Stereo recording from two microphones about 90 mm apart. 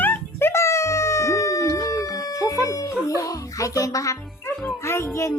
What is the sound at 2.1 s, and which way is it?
Music, 40° left (ahead or behind).